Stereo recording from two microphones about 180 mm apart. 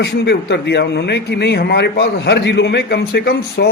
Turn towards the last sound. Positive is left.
turn(degrees=65)  # may be behind; listen again after turning